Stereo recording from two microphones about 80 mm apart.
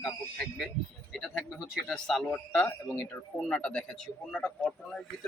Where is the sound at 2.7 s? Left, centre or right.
Left.